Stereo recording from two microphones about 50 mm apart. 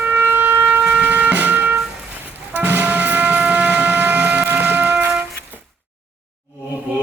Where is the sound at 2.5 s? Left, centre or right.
Right.